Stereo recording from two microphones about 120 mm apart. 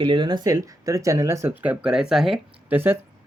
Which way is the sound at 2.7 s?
15° right (ahead or behind).